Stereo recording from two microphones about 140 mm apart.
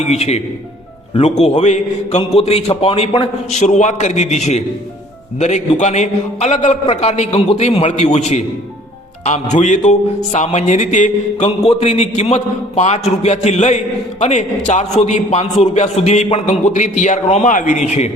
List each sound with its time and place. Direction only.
0.1 s a man's voice: 50° left (ahead or behind)